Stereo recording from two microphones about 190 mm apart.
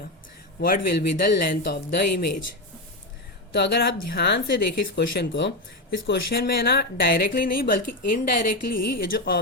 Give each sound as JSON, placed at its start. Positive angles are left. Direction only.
{"t": 0.6, "sound": "speech", "side_deg": 50}
{"t": 3.5, "sound": "speech", "side_deg": 60}